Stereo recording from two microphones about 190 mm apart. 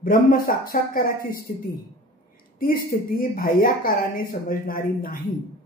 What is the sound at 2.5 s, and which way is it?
A woman's voice, 50° left (ahead or behind).